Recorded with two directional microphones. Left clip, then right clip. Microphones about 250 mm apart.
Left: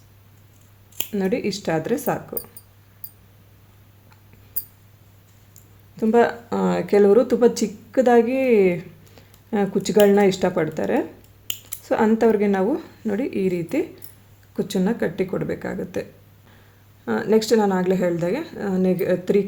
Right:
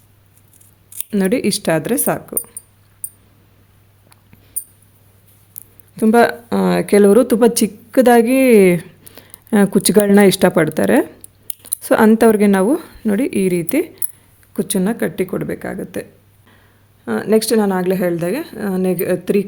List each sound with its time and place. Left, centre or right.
1.1 s speech: right
6.0 s speech: right
17.1 s a woman's voice: right